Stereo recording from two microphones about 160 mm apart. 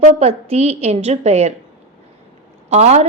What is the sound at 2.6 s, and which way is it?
Speech, 45° right (ahead or behind).